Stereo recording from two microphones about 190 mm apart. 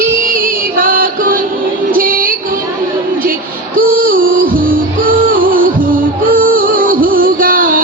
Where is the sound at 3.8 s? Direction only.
45° right (ahead or behind).